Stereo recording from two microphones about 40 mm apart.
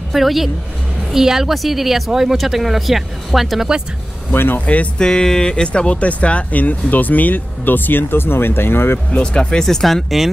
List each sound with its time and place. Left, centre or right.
0.1 s a woman's voice: centre
4.6 s speech: left
4.9 s speech: centre; by 9.0 s left
9.1 s speech: left
9.7 s speech: centre